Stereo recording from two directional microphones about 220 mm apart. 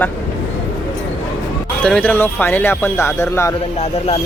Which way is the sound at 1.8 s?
5° left (ahead or behind).